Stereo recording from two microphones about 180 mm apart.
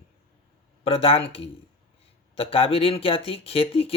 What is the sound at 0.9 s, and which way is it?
Speech, 35° left (ahead or behind).